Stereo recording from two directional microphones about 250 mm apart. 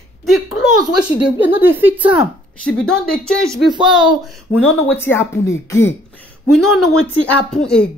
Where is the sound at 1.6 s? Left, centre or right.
Centre.